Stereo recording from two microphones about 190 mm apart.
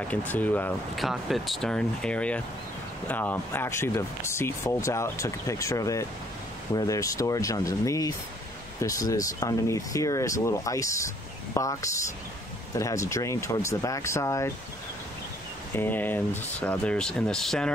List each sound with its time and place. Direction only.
0.1 s speech: 10° left (ahead or behind)
15.7 s speech: 10° left (ahead or behind)